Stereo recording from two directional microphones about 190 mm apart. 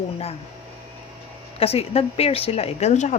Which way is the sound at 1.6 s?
30° left (ahead or behind).